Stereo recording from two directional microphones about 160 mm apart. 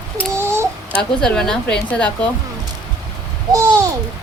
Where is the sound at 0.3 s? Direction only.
15° right (ahead or behind).